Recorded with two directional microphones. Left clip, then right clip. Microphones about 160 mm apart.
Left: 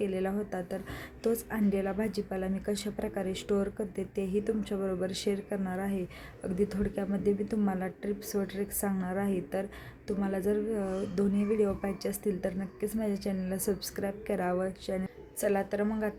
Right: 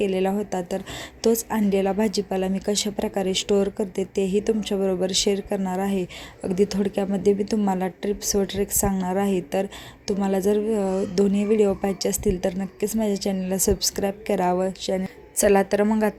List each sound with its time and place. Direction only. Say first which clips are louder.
0.0 s a woman's voice: right 9 dB; 30° right (ahead or behind)
15.0 s a woman's voice: right 12 dB; 45° right (ahead or behind)